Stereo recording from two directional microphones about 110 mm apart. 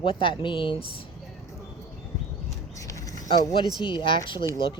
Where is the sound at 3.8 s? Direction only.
50° left (ahead or behind).